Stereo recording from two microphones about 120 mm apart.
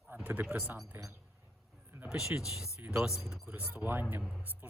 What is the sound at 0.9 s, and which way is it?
Speech, 25° right (ahead or behind).